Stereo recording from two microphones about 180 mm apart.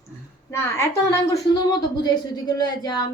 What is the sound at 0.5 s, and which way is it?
Speech, 15° left (ahead or behind).